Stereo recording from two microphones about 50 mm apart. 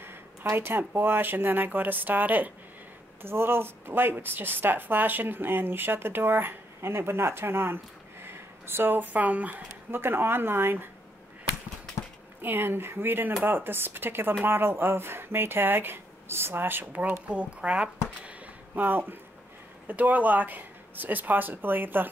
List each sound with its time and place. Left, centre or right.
0.0 s speech: right
3.2 s speech: right
9.8 s speech: right
12.4 s speech: right
17.3 s speech: right
18.8 s speech: right